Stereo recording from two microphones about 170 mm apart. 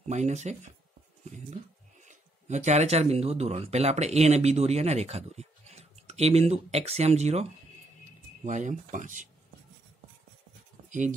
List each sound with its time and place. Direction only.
0.1 s speech: 45° right (ahead or behind)
2.0 s speech: 45° right (ahead or behind)
8.5 s speech: 45° right (ahead or behind)
10.9 s speech: 50° right (ahead or behind)